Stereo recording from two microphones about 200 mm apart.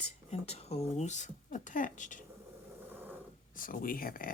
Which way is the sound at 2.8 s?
10° right (ahead or behind).